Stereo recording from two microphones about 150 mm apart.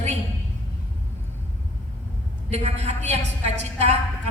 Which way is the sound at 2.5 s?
45° right (ahead or behind).